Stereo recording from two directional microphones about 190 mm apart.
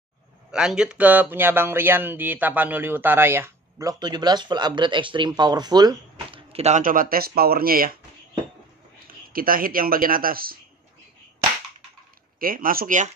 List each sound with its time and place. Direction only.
0.5 s speech: 5° right (ahead or behind); by 6.4 s 20° right (ahead or behind)
6.5 s speech: 35° right (ahead or behind)
9.0 s speech: 50° right (ahead or behind)
12.4 s speech: 50° right (ahead or behind)